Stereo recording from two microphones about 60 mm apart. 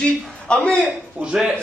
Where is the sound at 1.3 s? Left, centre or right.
Centre.